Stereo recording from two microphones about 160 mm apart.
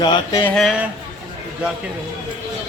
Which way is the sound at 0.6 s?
Centre (ahead or behind).